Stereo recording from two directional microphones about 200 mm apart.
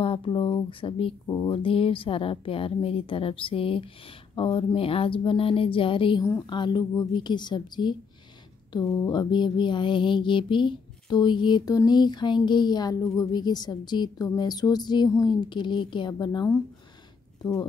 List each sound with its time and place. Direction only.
0.0 s child singing: 25° left (ahead or behind)
9.1 s child singing: 20° left (ahead or behind)